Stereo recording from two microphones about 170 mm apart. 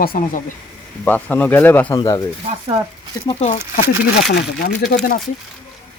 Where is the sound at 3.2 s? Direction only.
40° left (ahead or behind).